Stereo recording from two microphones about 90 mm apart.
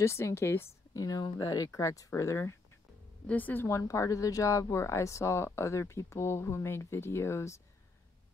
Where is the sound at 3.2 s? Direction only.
20° left (ahead or behind).